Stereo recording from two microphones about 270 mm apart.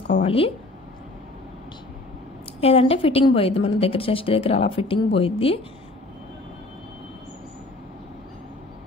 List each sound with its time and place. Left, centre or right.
0.2 s a woman's voice: left
2.6 s a woman's voice: left